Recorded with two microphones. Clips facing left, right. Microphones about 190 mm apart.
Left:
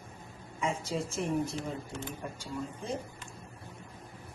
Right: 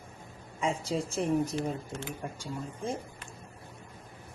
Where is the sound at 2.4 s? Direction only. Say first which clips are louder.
Right 1 dB; 50° right (ahead or behind).